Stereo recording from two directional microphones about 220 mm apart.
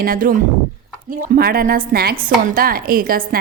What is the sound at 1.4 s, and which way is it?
A woman's voice, 45° right (ahead or behind).